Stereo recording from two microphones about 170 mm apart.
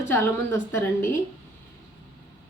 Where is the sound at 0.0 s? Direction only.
15° left (ahead or behind).